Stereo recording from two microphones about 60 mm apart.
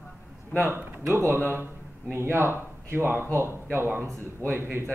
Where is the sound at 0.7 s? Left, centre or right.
Right.